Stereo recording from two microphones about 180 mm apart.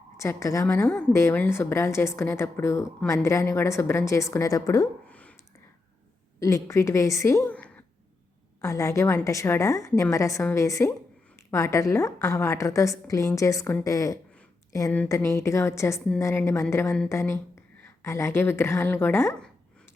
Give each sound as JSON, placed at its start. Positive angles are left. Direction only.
{"t": 0.2, "sound": "a woman's voice", "side_deg": 15}
{"t": 6.4, "sound": "a woman's voice", "side_deg": 15}